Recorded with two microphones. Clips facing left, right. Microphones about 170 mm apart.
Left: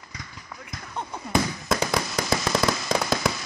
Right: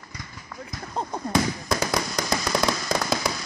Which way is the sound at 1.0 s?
35° right (ahead or behind).